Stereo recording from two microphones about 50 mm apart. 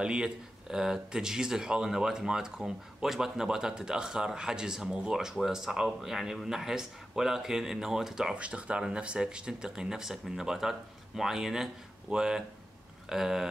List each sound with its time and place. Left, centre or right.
0.0 s speech: centre
5.1 s speech: centre
8.4 s speech: right